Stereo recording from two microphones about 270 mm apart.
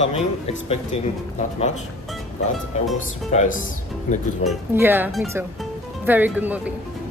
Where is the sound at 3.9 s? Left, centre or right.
Centre.